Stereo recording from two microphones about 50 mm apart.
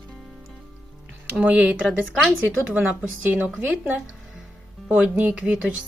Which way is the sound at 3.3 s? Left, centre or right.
Right.